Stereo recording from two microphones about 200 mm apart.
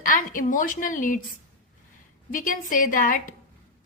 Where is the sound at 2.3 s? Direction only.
40° left (ahead or behind).